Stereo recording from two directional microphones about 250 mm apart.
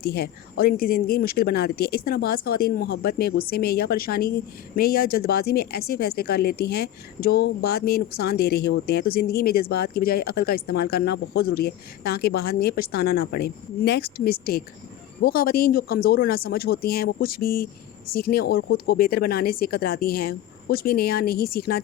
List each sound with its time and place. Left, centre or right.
0.0 s speech: left